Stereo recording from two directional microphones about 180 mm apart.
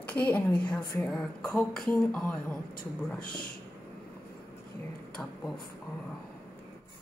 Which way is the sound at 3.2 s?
55° left (ahead or behind).